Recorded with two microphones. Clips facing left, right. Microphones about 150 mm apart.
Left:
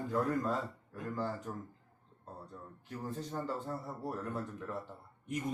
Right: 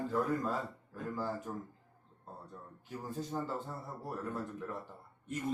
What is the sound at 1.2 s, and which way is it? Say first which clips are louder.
Speech: left 1 dB; 5° right (ahead or behind).